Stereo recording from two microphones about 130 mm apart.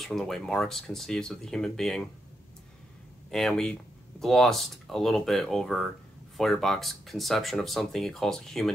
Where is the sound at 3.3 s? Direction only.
5° left (ahead or behind).